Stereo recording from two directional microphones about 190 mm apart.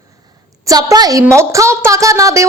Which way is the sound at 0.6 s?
20° right (ahead or behind).